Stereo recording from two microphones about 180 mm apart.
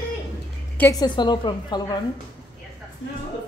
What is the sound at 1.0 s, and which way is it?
Speech, 25° left (ahead or behind).